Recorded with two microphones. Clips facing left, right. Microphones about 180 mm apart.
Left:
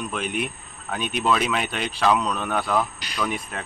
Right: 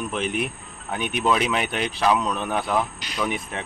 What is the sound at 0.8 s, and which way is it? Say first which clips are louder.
Speech: right 1 dB; 15° right (ahead or behind).